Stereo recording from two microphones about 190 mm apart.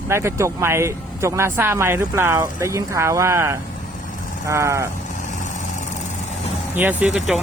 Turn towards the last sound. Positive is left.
turn(degrees=0)  # may be behind; listen again after turning